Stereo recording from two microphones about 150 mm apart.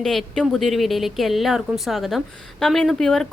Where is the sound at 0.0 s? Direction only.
Centre (ahead or behind).